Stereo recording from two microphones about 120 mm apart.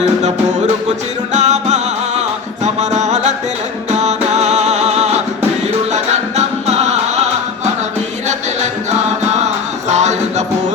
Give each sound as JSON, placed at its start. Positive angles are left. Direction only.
{"t": 1.3, "sound": "music", "side_deg": -70}
{"t": 8.9, "sound": "music", "side_deg": -70}